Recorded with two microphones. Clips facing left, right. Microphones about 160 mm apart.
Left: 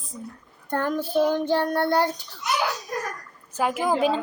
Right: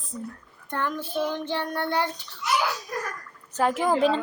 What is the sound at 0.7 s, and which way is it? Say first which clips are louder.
Child singing: left 5 dB; 40° left (ahead or behind).